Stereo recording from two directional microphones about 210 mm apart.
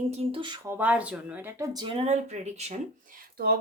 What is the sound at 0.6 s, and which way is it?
Speech, 10° right (ahead or behind).